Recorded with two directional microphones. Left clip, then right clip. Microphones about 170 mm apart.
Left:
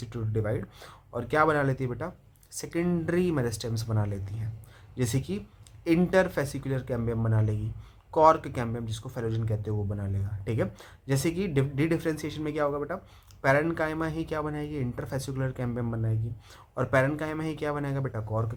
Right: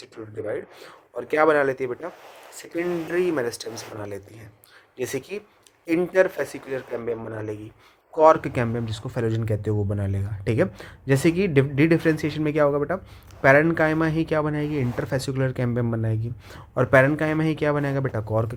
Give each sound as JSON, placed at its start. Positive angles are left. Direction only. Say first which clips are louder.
{"t": 0.5, "sound": "speech", "louder": "right 4 dB", "side_deg": -35}